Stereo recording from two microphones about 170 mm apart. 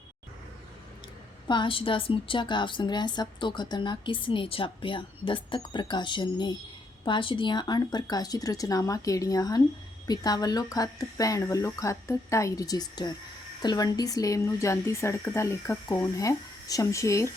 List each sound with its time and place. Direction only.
1.5 s a woman's voice: 30° left (ahead or behind)